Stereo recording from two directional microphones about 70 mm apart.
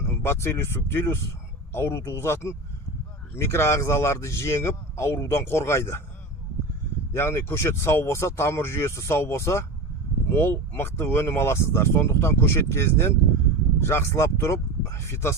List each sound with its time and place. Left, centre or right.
0.0 s speech: left
7.1 s speech: left